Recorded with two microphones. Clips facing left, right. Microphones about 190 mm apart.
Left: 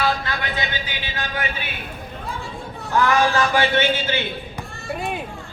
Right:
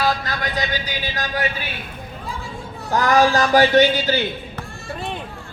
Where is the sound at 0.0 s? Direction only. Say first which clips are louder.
Right 1 dB; 40° right (ahead or behind).